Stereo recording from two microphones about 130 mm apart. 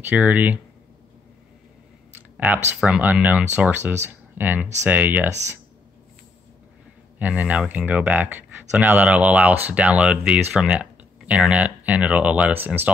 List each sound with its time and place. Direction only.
0.0 s speech: 10° right (ahead or behind)
2.3 s speech: 10° right (ahead or behind)
7.2 s speech: 10° right (ahead or behind)